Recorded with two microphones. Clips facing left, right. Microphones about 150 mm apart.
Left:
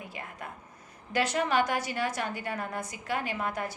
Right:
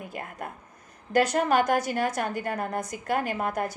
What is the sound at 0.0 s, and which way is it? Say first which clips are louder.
A woman's voice: right 5 dB; 50° right (ahead or behind).